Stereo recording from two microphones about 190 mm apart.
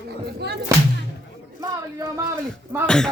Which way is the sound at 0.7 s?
15° right (ahead or behind).